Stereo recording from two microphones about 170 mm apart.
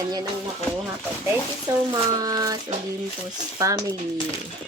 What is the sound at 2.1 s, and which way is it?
Speech, 20° right (ahead or behind).